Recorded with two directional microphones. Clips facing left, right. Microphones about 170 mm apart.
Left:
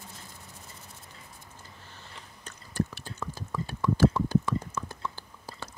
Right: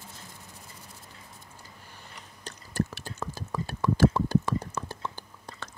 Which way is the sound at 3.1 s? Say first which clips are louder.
Right 1 dB; 40° right (ahead or behind).